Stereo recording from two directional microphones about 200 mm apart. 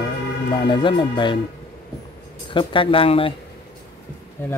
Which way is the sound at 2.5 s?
25° left (ahead or behind).